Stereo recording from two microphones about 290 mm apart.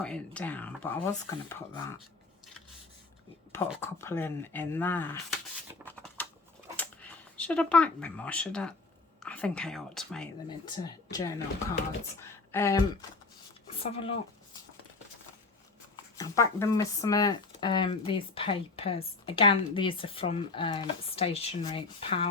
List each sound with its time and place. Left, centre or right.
0.0 s speech: centre
3.8 s speech: centre
5.8 s a sound: centre
7.3 s speech: centre
10.7 s speech: centre
16.1 s speech: centre